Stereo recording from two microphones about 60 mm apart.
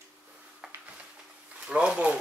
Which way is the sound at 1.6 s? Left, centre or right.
Centre.